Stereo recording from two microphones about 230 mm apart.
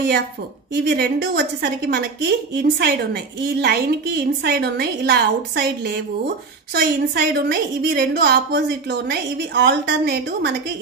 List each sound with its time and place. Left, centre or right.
0.8 s a woman's voice: right
6.7 s a woman's voice: right
9.6 s a woman's voice: right